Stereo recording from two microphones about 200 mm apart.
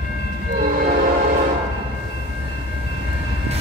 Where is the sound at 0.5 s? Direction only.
45° right (ahead or behind).